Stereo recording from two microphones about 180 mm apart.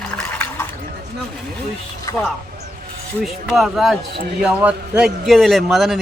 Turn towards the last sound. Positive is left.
turn(degrees=0)  # may be behind; listen again after turning